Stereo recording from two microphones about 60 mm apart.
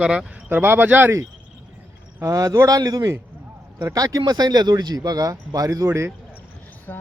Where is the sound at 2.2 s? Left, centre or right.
Right.